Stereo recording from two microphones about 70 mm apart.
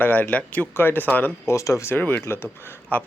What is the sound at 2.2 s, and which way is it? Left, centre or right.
Speech, left.